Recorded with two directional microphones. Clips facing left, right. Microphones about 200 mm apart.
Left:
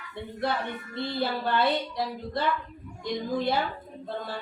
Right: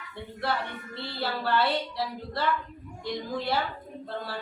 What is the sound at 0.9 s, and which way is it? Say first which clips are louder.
Speech: left 4 dB; 20° left (ahead or behind).